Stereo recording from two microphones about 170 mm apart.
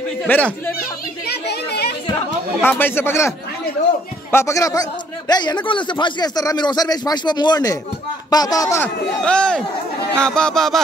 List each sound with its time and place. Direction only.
0.3 s a man's voice: 10° left (ahead or behind)
1.2 s chatter: 75° left (ahead or behind)
2.6 s a man's voice: 10° left (ahead or behind)